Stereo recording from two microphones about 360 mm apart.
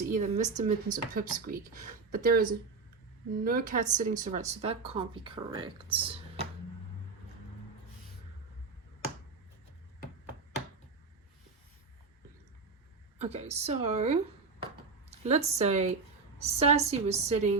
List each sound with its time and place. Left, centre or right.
0.0 s speech: right
13.1 s speech: centre
15.2 s speech: centre